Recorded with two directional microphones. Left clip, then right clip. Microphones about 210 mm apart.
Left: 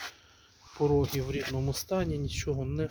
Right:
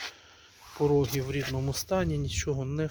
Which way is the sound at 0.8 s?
5° right (ahead or behind).